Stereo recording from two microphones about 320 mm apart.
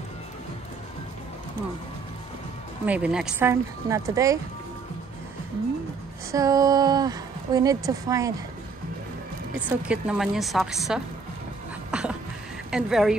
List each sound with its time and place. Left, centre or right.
2.8 s speech: centre
6.3 s a woman's voice: centre
9.7 s speech: centre
11.9 s a sound: centre
12.7 s speech: centre